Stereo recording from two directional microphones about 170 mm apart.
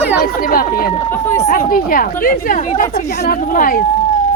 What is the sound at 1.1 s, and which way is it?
Speech, 15° left (ahead or behind).